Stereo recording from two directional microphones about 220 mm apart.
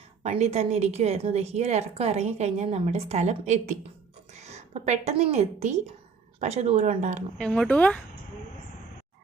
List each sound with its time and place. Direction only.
0.2 s a woman's voice: 30° right (ahead or behind)
7.3 s speech: 5° left (ahead or behind)